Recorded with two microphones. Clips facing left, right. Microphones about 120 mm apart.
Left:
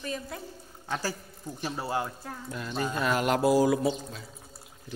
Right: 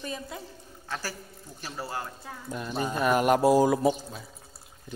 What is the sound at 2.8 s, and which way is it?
Speech, 15° right (ahead or behind).